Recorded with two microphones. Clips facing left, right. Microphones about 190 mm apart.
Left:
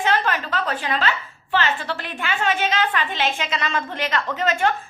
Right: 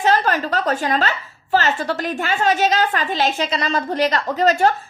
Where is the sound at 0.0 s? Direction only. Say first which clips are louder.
Right 4 dB; 40° right (ahead or behind).